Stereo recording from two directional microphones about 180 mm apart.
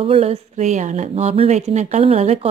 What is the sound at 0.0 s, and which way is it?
A woman's voice, 35° right (ahead or behind).